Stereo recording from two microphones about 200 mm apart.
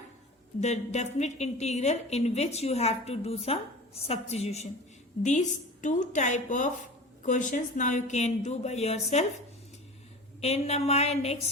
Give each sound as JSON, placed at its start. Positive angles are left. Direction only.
{"t": 0.6, "sound": "a woman's voice", "side_deg": 35}
{"t": 10.4, "sound": "a woman's voice", "side_deg": 30}